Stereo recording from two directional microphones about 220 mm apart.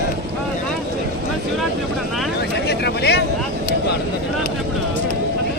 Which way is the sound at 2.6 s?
50° left (ahead or behind).